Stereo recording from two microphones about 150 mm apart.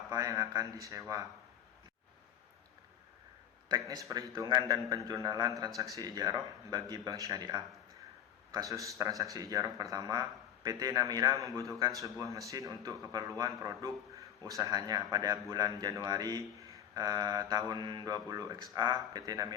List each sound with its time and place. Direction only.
0.1 s speech: 20° right (ahead or behind)
3.7 s speech: 25° right (ahead or behind)